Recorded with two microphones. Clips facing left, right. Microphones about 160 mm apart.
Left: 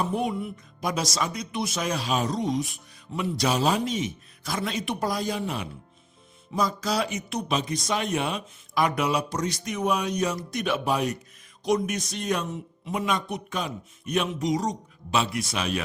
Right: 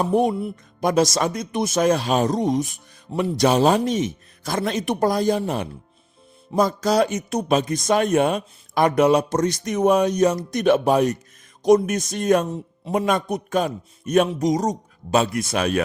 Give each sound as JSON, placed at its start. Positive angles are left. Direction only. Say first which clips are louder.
{"t": 0.0, "sound": "speech", "louder": "right 7 dB", "side_deg": -45}